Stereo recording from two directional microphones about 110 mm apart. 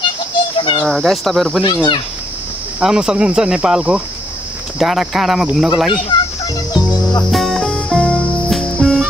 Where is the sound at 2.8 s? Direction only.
5° right (ahead or behind).